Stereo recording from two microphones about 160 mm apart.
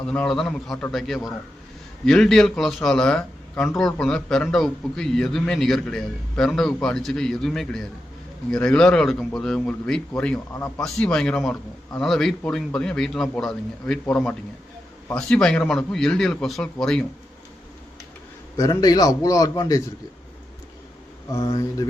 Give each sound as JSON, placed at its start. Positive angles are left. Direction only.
{"t": 0.1, "sound": "a man's voice", "side_deg": 5}
{"t": 18.5, "sound": "a man's voice", "side_deg": 20}
{"t": 21.3, "sound": "a man's voice", "side_deg": 25}